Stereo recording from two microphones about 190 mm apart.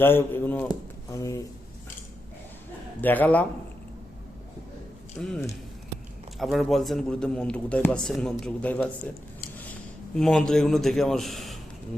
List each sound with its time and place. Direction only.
0.0 s a man's voice: 10° left (ahead or behind)
1.1 s a sound: 15° left (ahead or behind)
3.0 s a man's voice: 10° left (ahead or behind)
5.2 s a man's voice: 5° left (ahead or behind)
10.2 s a man's voice: 5° left (ahead or behind)